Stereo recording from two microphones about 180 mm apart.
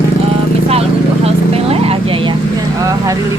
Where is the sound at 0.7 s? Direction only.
35° right (ahead or behind).